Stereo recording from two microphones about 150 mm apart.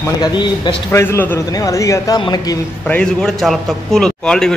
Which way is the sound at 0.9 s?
15° left (ahead or behind).